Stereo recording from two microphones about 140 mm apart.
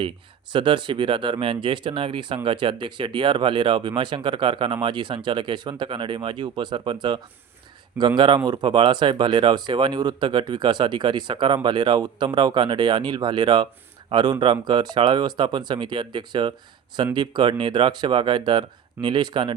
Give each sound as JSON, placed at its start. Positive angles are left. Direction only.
{"t": 0.5, "sound": "speech", "side_deg": -35}